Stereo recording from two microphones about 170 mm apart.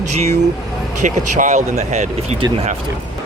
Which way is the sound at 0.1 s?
40° right (ahead or behind).